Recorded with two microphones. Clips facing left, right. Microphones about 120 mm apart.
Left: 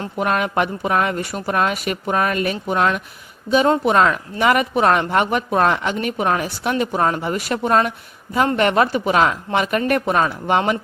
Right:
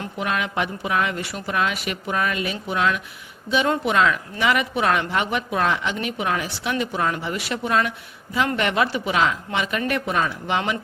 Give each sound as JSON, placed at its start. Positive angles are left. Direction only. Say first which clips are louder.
{"t": 0.2, "sound": "speech", "louder": "left 6 dB", "side_deg": 45}